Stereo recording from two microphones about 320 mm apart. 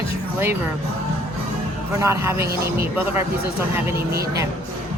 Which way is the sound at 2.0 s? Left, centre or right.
Centre.